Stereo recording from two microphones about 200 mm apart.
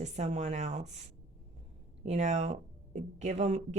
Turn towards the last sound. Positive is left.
turn(degrees=-35)  # may be behind; listen again after turning